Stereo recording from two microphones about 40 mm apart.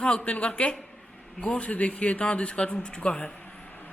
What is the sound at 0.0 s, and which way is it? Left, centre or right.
A woman's voice, left.